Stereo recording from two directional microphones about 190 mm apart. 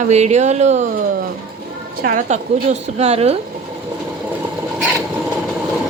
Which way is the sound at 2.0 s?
40° right (ahead or behind).